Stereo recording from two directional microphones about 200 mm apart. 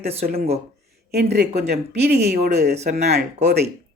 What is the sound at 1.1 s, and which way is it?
Speech, 55° right (ahead or behind).